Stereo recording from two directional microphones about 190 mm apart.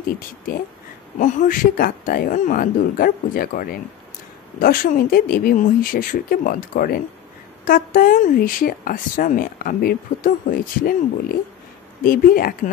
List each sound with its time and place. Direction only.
1.2 s a woman's voice: 45° left (ahead or behind)
12.0 s a woman's voice: 50° left (ahead or behind)